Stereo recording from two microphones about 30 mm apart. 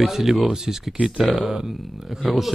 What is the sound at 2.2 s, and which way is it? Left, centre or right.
Speech, centre.